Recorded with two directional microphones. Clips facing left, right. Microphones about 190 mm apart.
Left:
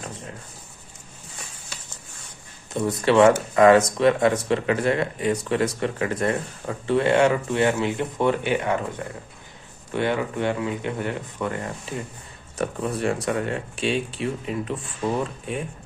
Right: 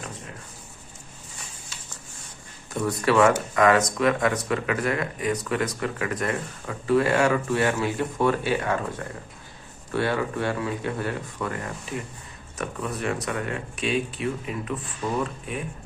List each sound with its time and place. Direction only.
2.7 s speech: 25° left (ahead or behind)
9.9 s speech: 20° left (ahead or behind)